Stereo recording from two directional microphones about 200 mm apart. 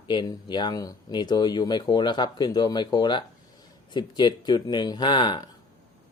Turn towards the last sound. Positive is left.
turn(degrees=20)  # may be behind; listen again after turning